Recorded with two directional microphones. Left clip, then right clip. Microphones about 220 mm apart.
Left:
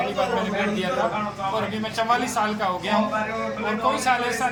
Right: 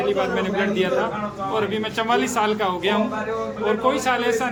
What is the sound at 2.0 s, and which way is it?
Speech, 30° right (ahead or behind).